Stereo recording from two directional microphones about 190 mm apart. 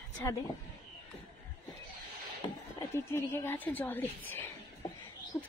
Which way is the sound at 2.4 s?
25° left (ahead or behind).